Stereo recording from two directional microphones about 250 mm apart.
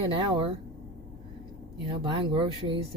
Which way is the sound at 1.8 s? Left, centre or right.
Centre.